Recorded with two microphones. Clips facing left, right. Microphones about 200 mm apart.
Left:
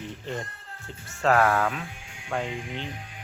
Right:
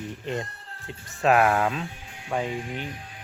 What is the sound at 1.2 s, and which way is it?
Speech, 15° right (ahead or behind).